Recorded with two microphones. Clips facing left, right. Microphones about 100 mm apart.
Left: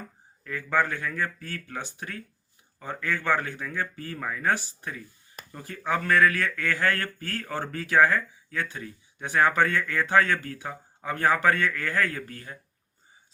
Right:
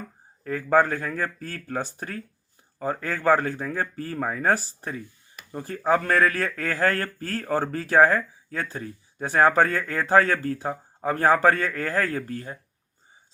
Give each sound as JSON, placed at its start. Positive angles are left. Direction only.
{"t": 0.4, "sound": "speech", "side_deg": -35}